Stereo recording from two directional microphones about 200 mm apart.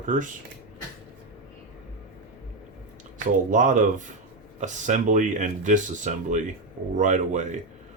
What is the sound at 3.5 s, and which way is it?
Speech, 40° right (ahead or behind).